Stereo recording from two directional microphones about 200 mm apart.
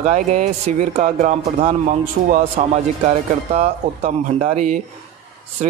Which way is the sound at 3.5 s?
30° right (ahead or behind).